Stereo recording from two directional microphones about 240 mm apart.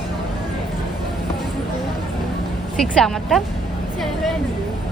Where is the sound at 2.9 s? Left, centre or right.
Centre.